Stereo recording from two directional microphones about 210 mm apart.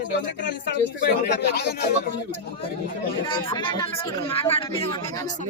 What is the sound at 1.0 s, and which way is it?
Speech, 50° left (ahead or behind).